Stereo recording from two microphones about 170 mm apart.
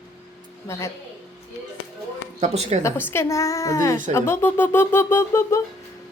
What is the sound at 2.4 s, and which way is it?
Speech, 40° right (ahead or behind).